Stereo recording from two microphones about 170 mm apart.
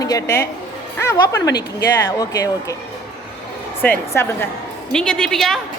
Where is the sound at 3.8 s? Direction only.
15° left (ahead or behind).